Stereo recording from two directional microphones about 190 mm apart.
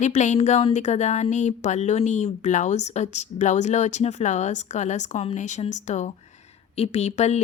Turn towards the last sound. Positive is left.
turn(degrees=35)  # may be behind; listen again after turning